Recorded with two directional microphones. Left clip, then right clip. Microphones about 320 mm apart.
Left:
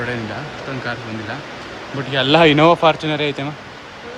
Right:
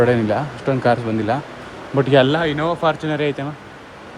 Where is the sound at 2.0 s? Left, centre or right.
Centre.